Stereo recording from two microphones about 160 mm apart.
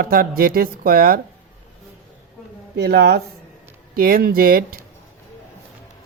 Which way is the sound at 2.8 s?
75° right (ahead or behind).